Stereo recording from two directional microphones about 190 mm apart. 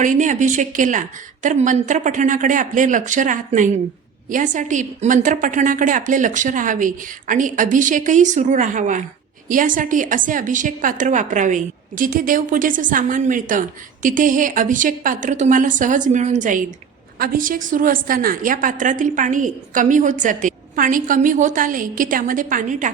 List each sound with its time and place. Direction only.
0.0 s a woman's voice: 40° right (ahead or behind)